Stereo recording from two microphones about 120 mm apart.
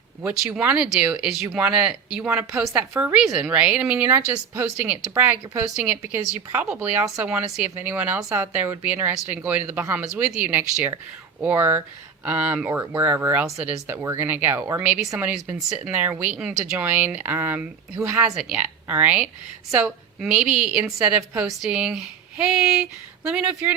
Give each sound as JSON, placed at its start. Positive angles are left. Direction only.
{"t": 0.2, "sound": "speech", "side_deg": -10}
{"t": 2.3, "sound": "a woman's voice", "side_deg": -20}
{"t": 3.2, "sound": "a woman's voice", "side_deg": -5}
{"t": 8.2, "sound": "a woman's voice", "side_deg": -25}
{"t": 18.2, "sound": "speech", "side_deg": -10}